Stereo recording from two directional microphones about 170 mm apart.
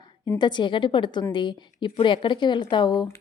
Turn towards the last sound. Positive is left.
turn(degrees=25)  # may be behind; listen again after turning